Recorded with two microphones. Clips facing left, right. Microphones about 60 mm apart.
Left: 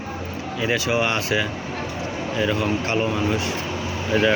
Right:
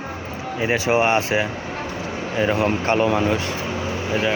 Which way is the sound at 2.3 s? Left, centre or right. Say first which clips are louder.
Right 3 dB; right.